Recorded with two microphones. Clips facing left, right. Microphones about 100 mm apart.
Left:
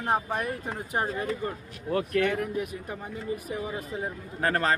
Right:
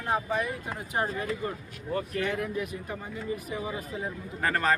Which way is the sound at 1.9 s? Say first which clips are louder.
Left 4 dB; 65° left (ahead or behind).